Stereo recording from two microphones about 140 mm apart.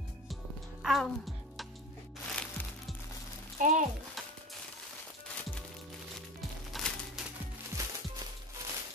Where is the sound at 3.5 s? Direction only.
70° right (ahead or behind).